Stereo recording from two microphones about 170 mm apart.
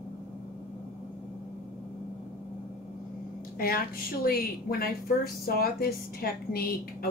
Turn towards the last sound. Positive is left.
turn(degrees=60)  # may be behind; listen again after turning